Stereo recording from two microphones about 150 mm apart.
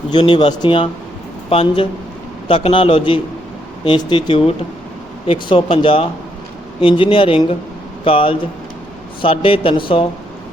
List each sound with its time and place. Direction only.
0.1 s speech: 30° left (ahead or behind)